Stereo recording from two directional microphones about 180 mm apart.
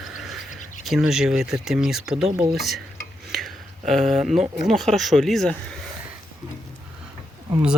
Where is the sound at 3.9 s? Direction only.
Centre (ahead or behind).